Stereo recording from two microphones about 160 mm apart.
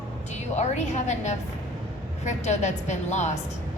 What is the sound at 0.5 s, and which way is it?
A woman's voice, 45° left (ahead or behind).